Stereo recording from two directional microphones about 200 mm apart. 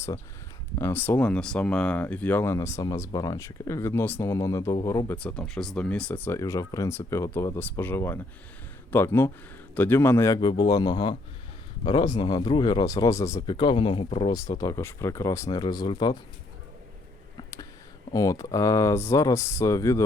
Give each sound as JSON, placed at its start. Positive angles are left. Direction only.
{"t": 0.8, "sound": "speech", "side_deg": 10}
{"t": 17.3, "sound": "a sound", "side_deg": 20}
{"t": 18.1, "sound": "speech", "side_deg": 15}